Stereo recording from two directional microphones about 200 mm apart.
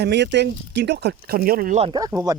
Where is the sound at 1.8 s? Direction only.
25° right (ahead or behind).